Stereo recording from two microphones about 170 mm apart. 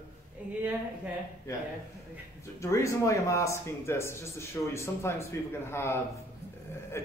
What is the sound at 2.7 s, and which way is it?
Speech, 15° left (ahead or behind).